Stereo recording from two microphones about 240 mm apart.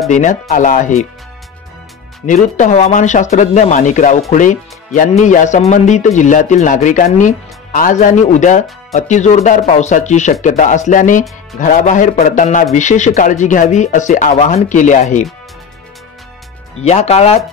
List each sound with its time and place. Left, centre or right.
0.1 s speech: left
2.2 s speech: left
16.8 s speech: left